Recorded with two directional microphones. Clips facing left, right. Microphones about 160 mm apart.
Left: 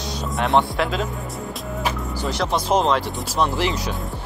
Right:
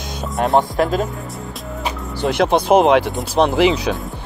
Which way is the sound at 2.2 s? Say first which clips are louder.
Right 9 dB; 60° right (ahead or behind).